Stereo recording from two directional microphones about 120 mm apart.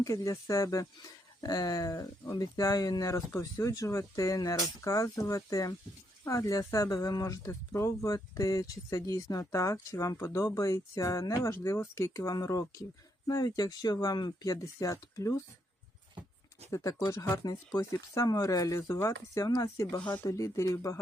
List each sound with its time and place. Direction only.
0.0 s speech: 30° left (ahead or behind)
16.7 s speech: 25° left (ahead or behind)